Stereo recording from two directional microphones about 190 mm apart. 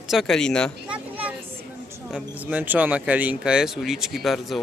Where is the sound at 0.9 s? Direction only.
10° right (ahead or behind).